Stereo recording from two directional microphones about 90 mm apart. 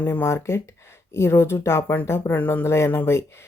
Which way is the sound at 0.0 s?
25° left (ahead or behind).